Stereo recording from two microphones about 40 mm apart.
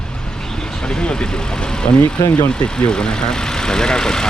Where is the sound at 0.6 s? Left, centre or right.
Centre.